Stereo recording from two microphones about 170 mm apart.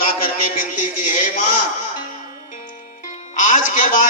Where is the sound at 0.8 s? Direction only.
50° left (ahead or behind).